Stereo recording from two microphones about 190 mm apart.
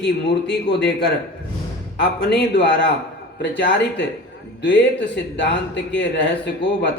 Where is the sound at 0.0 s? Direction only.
65° left (ahead or behind).